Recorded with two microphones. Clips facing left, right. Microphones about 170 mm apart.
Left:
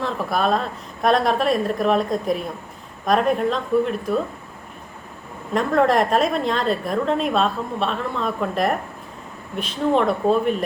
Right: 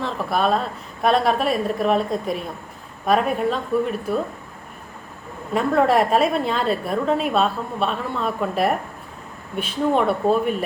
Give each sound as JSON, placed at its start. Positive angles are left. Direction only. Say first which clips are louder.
{"t": 0.0, "sound": "a woman's voice", "louder": "even", "side_deg": 0}
{"t": 5.5, "sound": "a woman's voice", "louder": "even", "side_deg": -5}